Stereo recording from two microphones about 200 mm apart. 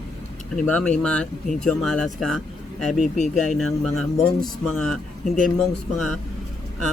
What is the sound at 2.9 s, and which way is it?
Speech, 40° left (ahead or behind).